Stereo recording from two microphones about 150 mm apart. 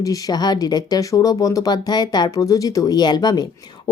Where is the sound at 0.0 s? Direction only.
25° left (ahead or behind).